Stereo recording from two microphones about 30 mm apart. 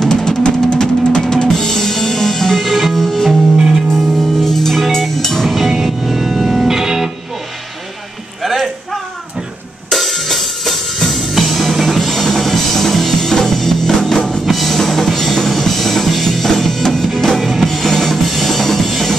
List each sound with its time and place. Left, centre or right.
0.0 s music: centre
1.5 s music: centre
4.4 s music: centre
5.6 s music: centre
8.4 s a sound: centre
9.8 s music: centre
14.4 s music: centre
17.2 s drum kit: centre